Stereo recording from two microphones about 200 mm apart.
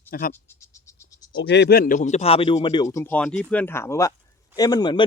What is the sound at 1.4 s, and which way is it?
Speech, 55° left (ahead or behind).